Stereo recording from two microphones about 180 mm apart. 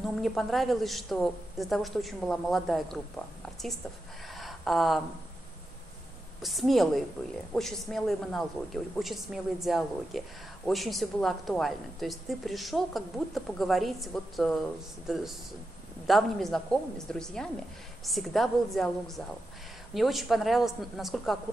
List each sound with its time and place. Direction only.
0.0 s speech: centre (ahead or behind)
4.3 s a sound: centre (ahead or behind)
6.4 s speech: centre (ahead or behind)